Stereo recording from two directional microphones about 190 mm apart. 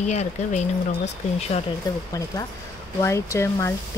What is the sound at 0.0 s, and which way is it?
Speech, 35° left (ahead or behind).